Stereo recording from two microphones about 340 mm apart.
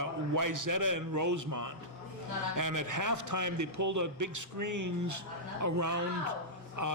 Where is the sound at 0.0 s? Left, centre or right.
Right.